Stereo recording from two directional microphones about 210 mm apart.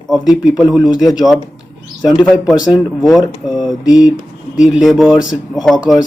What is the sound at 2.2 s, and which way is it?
Speech, 5° left (ahead or behind).